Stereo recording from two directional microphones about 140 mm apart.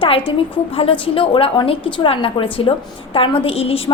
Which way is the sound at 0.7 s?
40° left (ahead or behind).